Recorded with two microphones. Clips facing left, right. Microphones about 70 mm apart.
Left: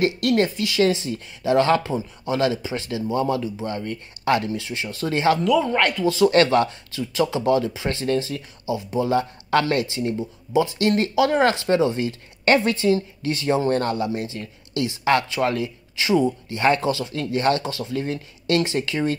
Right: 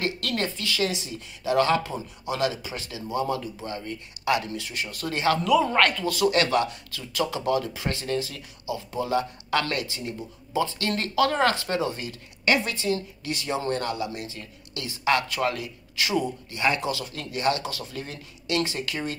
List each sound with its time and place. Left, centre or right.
0.0 s speech: left
0.8 s speech: left
5.8 s speech: centre
6.0 s speech: left
10.6 s speech: centre
12.4 s speech: left